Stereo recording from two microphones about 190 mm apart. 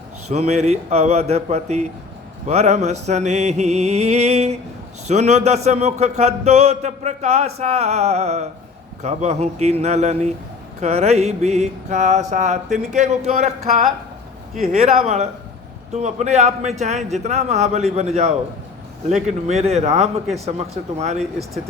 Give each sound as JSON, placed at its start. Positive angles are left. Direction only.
{"t": 0.3, "sound": "a man's voice", "side_deg": -35}
{"t": 21.2, "sound": "speech", "side_deg": 0}